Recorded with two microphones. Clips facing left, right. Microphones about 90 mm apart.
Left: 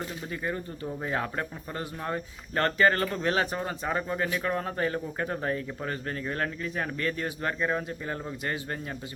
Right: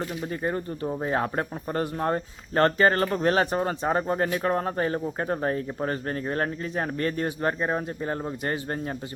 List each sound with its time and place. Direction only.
0.4 s speech: 35° right (ahead or behind)
2.1 s speech: 35° right (ahead or behind)